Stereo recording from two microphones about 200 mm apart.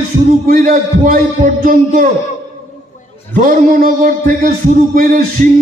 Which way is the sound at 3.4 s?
45° right (ahead or behind).